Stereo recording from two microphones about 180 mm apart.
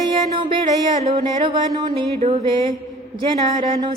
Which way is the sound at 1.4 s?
20° right (ahead or behind).